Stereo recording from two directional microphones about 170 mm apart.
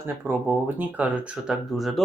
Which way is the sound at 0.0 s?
10° right (ahead or behind).